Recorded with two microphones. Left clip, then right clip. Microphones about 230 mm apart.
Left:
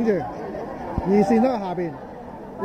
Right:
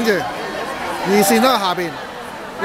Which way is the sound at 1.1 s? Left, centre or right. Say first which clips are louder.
Right 5 dB; right.